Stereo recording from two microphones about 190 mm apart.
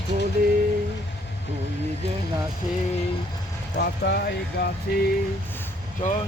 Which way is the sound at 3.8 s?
60° left (ahead or behind).